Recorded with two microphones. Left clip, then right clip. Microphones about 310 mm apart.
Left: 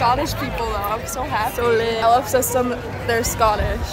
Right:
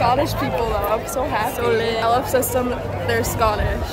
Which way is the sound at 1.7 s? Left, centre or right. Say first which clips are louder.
Left 3 dB; centre.